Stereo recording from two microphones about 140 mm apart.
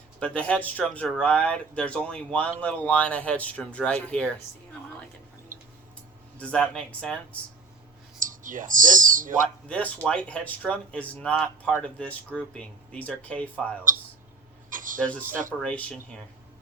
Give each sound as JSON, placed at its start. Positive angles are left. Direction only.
{"t": 0.2, "sound": "speech", "side_deg": 10}
{"t": 5.5, "sound": "tick-tock", "side_deg": -75}
{"t": 6.4, "sound": "speech", "side_deg": 5}
{"t": 8.2, "sound": "speech", "side_deg": -70}
{"t": 9.6, "sound": "speech", "side_deg": 10}
{"t": 14.7, "sound": "a sound", "side_deg": -70}
{"t": 15.6, "sound": "speech", "side_deg": 10}